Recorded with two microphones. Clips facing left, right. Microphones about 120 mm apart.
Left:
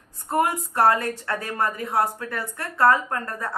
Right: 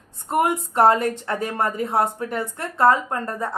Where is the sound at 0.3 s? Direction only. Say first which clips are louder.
Right 2 dB; 20° right (ahead or behind).